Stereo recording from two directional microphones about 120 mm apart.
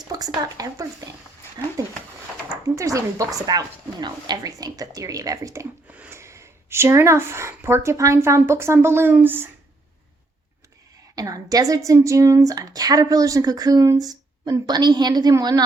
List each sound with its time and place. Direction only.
0.1 s speech: 30° right (ahead or behind)
2.6 s speech: 30° right (ahead or behind)
5.9 s a sound: 10° right (ahead or behind)
6.1 s speech: 25° right (ahead or behind)
11.1 s speech: 30° right (ahead or behind)